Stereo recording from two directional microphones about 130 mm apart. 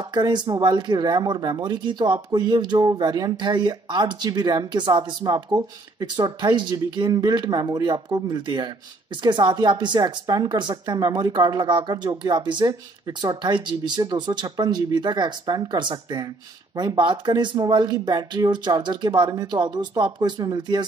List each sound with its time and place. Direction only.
0.1 s speech: 35° right (ahead or behind)